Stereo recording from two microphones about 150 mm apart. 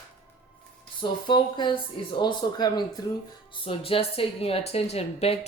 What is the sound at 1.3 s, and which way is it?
Speech, 30° left (ahead or behind).